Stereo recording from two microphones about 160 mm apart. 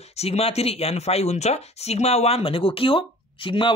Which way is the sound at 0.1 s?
40° left (ahead or behind).